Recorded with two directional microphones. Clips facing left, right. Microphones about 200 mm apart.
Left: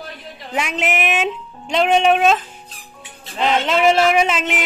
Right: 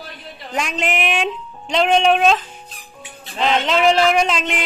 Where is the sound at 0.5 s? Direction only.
5° left (ahead or behind).